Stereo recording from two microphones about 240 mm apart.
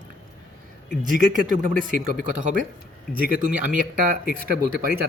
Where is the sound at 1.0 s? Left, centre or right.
Right.